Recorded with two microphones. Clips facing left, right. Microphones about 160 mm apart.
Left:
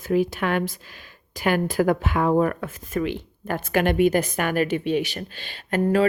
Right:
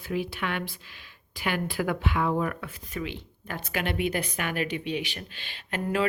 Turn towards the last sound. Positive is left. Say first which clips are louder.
# left 8 dB
turn(degrees=40)  # may be behind; listen again after turning